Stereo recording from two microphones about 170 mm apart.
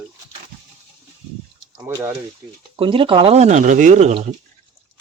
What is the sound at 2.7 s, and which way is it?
Speech, 30° right (ahead or behind).